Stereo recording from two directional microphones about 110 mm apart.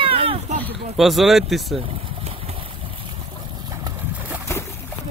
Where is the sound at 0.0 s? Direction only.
60° right (ahead or behind).